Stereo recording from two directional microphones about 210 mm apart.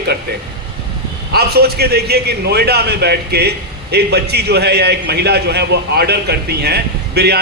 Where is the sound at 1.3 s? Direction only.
50° right (ahead or behind).